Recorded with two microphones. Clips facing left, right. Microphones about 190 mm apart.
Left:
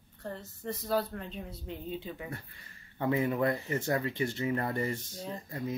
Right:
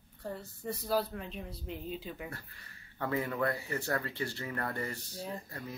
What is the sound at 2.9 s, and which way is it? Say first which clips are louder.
Speech: left 4 dB; 20° left (ahead or behind).